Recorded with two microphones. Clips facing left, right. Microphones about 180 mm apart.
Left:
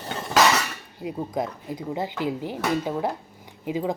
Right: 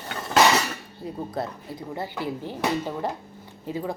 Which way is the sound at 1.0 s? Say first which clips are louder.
Left 3 dB; 15° left (ahead or behind).